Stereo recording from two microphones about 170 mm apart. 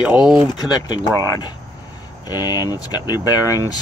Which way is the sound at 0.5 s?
25° left (ahead or behind).